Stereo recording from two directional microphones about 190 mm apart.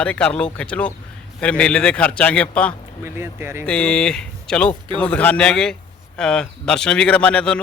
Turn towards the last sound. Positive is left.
turn(degrees=5)  # may be behind; listen again after turning